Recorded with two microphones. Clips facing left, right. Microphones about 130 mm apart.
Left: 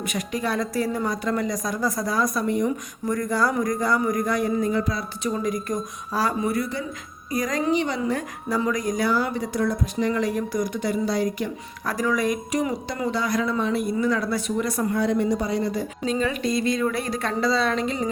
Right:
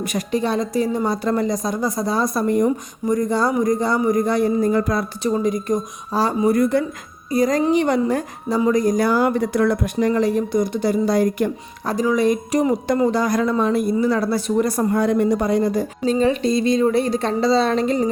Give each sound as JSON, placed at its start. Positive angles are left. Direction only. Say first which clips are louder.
{"t": 0.0, "sound": "speech", "louder": "right 5 dB", "side_deg": -35}
{"t": 3.1, "sound": "speech", "louder": "right 4 dB", "side_deg": -25}
{"t": 4.7, "sound": "speech", "louder": "right 6 dB", "side_deg": -50}
{"t": 5.2, "sound": "speech", "louder": "right 4 dB", "side_deg": -30}
{"t": 6.5, "sound": "speech", "louder": "right 9 dB", "side_deg": -50}
{"t": 7.3, "sound": "speech", "louder": "right 7 dB", "side_deg": -30}
{"t": 7.7, "sound": "speech", "louder": "right 6 dB", "side_deg": -50}
{"t": 8.4, "sound": "speech", "louder": "right 7 dB", "side_deg": -30}
{"t": 10.0, "sound": "speech", "louder": "right 5 dB", "side_deg": -35}
{"t": 11.9, "sound": "speech", "louder": "right 6 dB", "side_deg": -25}